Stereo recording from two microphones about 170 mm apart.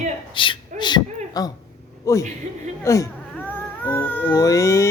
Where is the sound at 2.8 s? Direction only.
20° left (ahead or behind).